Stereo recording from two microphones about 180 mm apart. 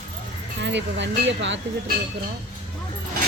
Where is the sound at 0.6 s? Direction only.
80° right.